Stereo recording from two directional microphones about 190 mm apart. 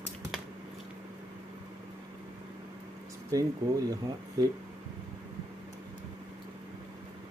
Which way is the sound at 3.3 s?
20° right (ahead or behind).